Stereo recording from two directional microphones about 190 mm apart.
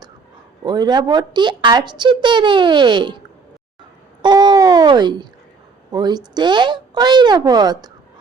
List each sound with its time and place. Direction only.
0.6 s a woman's voice: 20° right (ahead or behind)
4.2 s babbling: 20° right (ahead or behind)
5.9 s a woman's voice: 20° right (ahead or behind)